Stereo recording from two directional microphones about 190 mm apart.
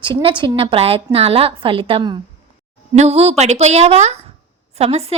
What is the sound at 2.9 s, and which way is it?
A woman's voice, 35° right (ahead or behind).